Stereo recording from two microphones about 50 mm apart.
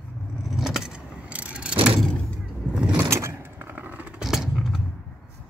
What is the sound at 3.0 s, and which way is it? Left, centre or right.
Vehicle, right.